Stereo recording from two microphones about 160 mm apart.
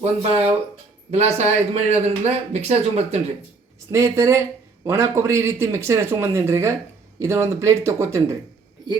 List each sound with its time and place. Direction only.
0.0 s a man's voice: 40° right (ahead or behind)
3.9 s a man's voice: 20° right (ahead or behind)